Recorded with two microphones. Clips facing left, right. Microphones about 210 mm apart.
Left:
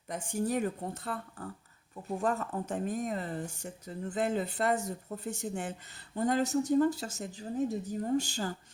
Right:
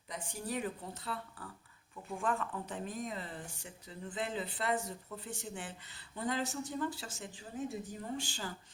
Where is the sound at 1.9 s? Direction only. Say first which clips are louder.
Left 5 dB; 40° left (ahead or behind).